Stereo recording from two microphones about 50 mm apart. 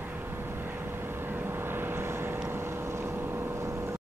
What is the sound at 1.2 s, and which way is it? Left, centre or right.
Vehicle, right.